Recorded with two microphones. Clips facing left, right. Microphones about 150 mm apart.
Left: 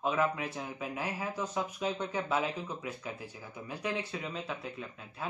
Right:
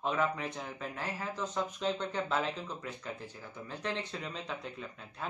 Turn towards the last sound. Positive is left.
turn(degrees=5)  # may be behind; listen again after turning